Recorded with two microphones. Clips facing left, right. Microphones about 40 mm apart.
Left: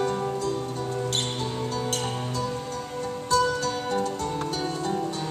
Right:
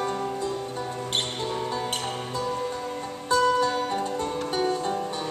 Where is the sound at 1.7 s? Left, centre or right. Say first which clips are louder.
Even; centre.